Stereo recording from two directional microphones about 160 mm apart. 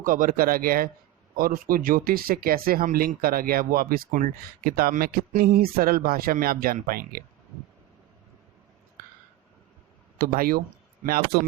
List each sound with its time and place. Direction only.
0.0 s speech: 60° right (ahead or behind)
10.2 s speech: 65° right (ahead or behind)